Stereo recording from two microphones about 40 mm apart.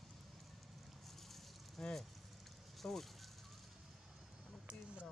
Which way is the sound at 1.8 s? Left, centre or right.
Centre.